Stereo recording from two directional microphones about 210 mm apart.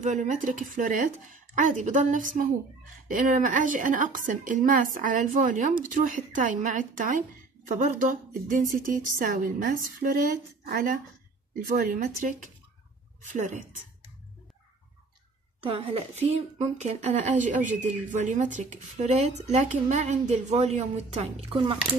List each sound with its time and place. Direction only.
0.0 s a woman's voice: 35° right (ahead or behind)
15.6 s a woman's voice: 25° right (ahead or behind)